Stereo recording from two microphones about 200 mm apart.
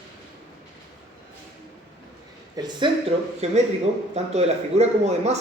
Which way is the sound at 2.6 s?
20° right (ahead or behind).